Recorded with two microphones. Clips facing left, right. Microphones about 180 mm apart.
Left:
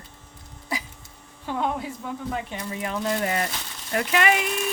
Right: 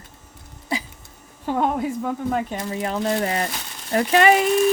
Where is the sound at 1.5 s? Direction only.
45° right (ahead or behind).